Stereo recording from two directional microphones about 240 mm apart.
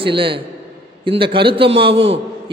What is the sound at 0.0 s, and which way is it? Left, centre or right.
A man's voice, right.